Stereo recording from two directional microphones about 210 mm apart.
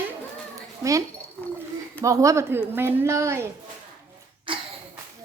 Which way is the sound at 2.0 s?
15° right (ahead or behind).